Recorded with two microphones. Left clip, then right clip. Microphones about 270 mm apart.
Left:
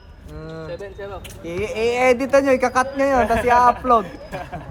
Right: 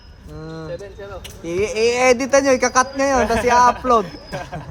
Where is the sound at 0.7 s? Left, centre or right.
Left.